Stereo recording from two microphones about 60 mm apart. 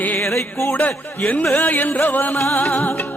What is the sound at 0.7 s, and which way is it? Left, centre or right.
Music, left.